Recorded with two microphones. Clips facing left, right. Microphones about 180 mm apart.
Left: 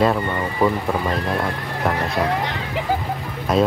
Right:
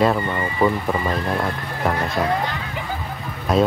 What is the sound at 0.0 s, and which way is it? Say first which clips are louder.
Speech: even; centre (ahead or behind).